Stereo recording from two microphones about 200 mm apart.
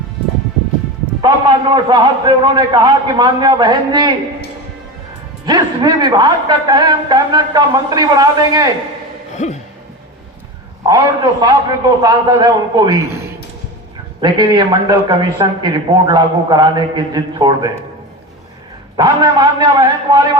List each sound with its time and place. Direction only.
1.2 s a man's voice: 20° right (ahead or behind)
5.5 s a man's voice: 20° right (ahead or behind)
9.3 s a sound: 35° left (ahead or behind)
10.8 s a man's voice: 20° right (ahead or behind)
14.2 s a man's voice: 20° right (ahead or behind)
18.9 s a man's voice: 20° right (ahead or behind)